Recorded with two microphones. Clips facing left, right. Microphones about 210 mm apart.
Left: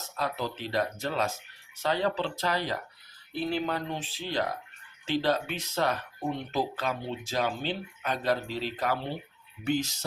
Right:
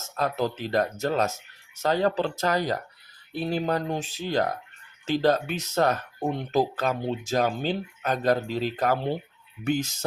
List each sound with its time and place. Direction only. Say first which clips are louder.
0.0 s speech: right 6 dB; 45° right (ahead or behind)